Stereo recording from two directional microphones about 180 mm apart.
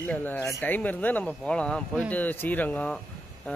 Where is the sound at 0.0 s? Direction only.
10° left (ahead or behind).